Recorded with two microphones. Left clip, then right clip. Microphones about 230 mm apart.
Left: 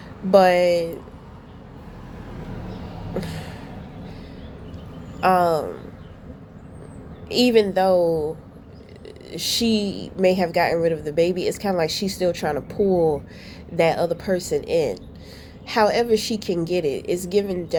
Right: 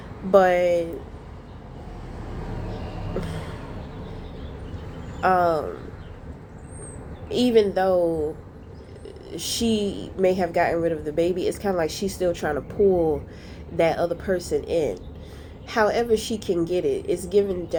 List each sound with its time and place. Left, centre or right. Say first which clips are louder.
0.3 s speech: left 2 dB; left
5.2 s a sound: left 2 dB; left
7.3 s speech: left 2 dB; left
9.3 s speech: left 5 dB; left
9.8 s a woman's voice: right 1 dB; left
10.2 s speech: left 2 dB; left